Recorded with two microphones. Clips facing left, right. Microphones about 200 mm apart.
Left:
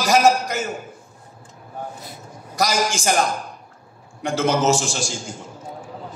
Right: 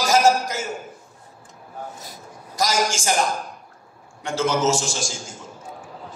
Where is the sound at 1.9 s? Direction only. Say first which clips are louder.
Left 2 dB; 40° right (ahead or behind).